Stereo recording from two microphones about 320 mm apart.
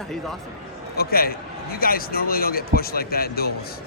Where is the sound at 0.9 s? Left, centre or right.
Left.